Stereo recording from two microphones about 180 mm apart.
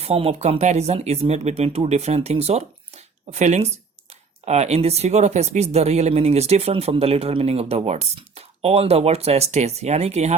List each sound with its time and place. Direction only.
0.0 s speech: 35° right (ahead or behind)